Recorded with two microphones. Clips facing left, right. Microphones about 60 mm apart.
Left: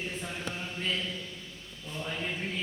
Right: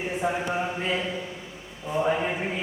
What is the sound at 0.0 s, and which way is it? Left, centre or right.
Speech, right.